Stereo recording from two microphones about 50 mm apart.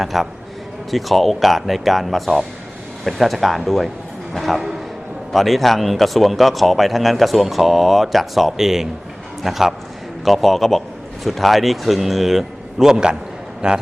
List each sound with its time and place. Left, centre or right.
0.0 s a man's voice: centre